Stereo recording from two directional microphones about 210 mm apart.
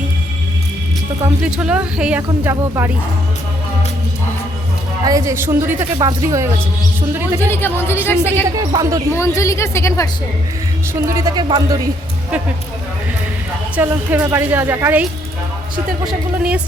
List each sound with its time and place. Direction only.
1.5 s speech: 5° right (ahead or behind)
5.0 s a woman's voice: 15° right (ahead or behind)
7.4 s a woman's voice: 10° left (ahead or behind)
8.7 s a woman's voice: 15° right (ahead or behind)
9.1 s a woman's voice: 15° left (ahead or behind)
11.0 s a woman's voice: 15° right (ahead or behind)
13.7 s a woman's voice: 10° right (ahead or behind)
16.0 s speech: 5° right (ahead or behind)